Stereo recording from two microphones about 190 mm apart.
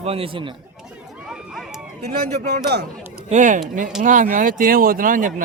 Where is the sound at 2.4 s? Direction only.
55° right (ahead or behind).